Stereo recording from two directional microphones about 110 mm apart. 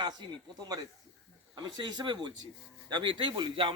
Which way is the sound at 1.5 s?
40° right (ahead or behind).